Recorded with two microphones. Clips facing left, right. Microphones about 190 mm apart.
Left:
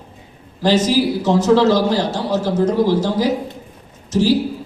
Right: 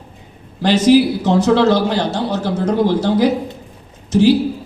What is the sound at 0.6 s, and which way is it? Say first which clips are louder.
A man's voice: right 4 dB; 65° right (ahead or behind).